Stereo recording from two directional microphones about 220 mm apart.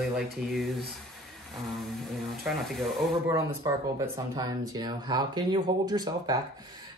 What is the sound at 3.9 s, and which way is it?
Speech, 15° right (ahead or behind).